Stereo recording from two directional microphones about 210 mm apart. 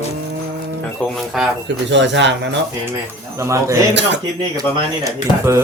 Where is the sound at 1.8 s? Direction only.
60° right (ahead or behind).